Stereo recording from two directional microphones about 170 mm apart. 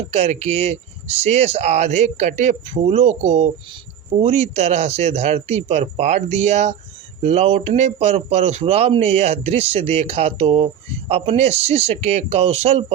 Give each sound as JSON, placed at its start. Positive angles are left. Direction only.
{"t": 0.1, "sound": "speech", "side_deg": -40}